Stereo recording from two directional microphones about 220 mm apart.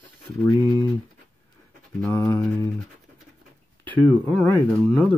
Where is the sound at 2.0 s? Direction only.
10° left (ahead or behind).